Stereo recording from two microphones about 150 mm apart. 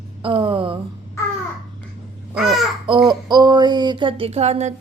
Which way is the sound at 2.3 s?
Centre (ahead or behind).